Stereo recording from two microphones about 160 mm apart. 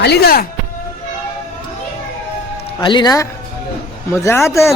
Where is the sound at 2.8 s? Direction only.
30° left (ahead or behind).